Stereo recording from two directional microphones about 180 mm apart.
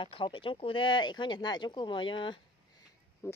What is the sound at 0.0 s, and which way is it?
Speech, 30° left (ahead or behind).